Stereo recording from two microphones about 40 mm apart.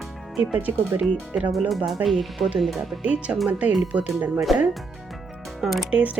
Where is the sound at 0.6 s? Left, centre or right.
Right.